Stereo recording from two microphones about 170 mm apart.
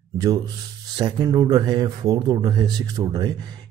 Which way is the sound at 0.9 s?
25° right (ahead or behind).